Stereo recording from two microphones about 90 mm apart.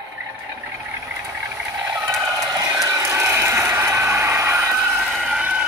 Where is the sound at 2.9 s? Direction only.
30° right (ahead or behind).